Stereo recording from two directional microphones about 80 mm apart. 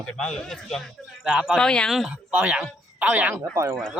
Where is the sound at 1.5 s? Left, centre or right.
Centre.